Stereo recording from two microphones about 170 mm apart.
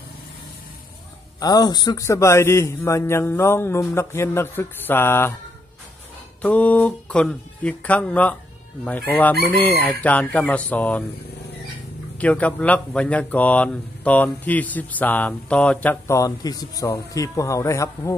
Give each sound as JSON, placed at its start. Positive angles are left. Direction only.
{"t": 1.4, "sound": "speech", "side_deg": 25}
{"t": 6.4, "sound": "speech", "side_deg": 10}
{"t": 12.2, "sound": "speech", "side_deg": 10}